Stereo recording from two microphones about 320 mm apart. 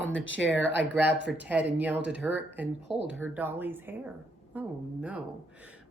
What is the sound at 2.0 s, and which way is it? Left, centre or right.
Speech, centre.